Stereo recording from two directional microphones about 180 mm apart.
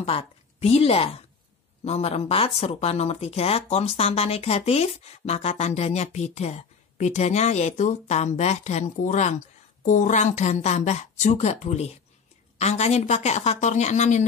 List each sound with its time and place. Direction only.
0.0 s speech: 30° left (ahead or behind)